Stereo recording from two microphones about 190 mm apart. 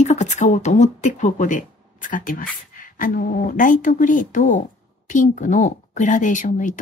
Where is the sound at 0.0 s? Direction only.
35° left (ahead or behind).